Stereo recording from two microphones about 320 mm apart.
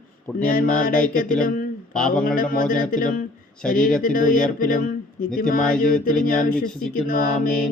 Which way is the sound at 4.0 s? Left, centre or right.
Left.